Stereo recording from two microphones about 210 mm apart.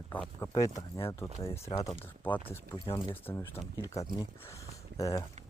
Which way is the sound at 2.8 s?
20° left (ahead or behind).